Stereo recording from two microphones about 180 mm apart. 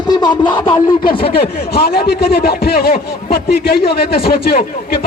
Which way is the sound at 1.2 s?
60° left (ahead or behind).